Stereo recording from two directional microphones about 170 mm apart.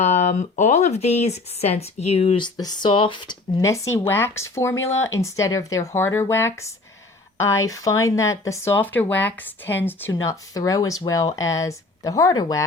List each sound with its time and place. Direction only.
0.0 s speech: 45° left (ahead or behind); by 3.3 s 30° left (ahead or behind)
3.6 s speech: 15° left (ahead or behind)